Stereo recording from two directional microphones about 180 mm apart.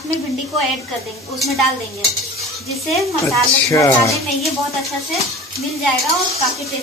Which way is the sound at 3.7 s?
15° left (ahead or behind).